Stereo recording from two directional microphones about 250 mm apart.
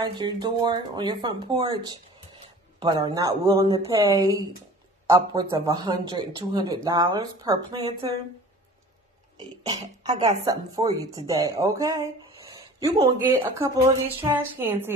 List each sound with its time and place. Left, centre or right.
0.0 s speech: centre
10.0 s speech: centre